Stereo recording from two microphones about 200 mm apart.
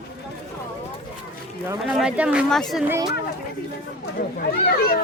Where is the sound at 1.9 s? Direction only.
5° right (ahead or behind).